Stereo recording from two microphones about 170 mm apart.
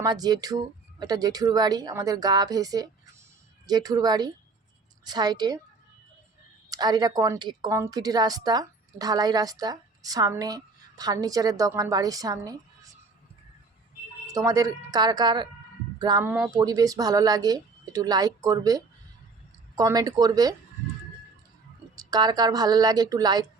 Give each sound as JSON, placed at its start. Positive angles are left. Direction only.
{"t": 0.0, "sound": "a woman's voice", "side_deg": -25}
{"t": 6.7, "sound": "a woman's voice", "side_deg": -25}
{"t": 14.3, "sound": "a woman's voice", "side_deg": -20}
{"t": 21.9, "sound": "a woman's voice", "side_deg": -25}